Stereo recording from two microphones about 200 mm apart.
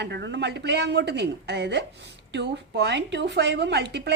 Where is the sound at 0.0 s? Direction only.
60° right (ahead or behind).